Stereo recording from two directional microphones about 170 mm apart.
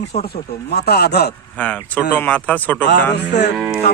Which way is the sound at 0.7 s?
70° left (ahead or behind).